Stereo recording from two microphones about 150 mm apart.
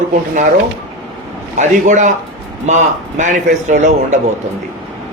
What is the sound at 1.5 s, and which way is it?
Speech, 55° right (ahead or behind).